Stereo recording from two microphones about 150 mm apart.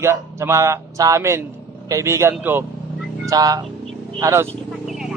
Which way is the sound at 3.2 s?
25° right (ahead or behind).